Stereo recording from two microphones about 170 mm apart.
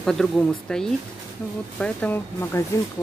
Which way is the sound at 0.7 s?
5° left (ahead or behind).